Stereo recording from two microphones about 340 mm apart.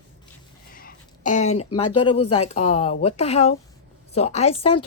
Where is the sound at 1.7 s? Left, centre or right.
Left.